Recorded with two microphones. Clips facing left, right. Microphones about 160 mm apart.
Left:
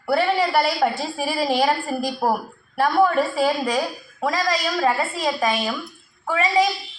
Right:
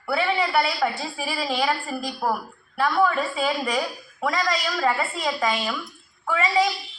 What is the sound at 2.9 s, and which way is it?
Speech, 45° left (ahead or behind).